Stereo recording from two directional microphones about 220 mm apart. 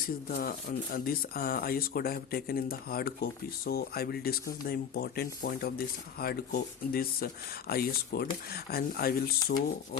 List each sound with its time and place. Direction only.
0.0 s speech: 40° left (ahead or behind)